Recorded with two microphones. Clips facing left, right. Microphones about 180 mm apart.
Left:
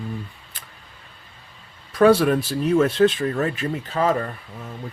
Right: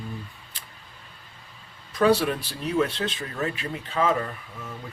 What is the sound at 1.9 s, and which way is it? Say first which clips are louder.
Speech: left 6 dB; 50° left (ahead or behind).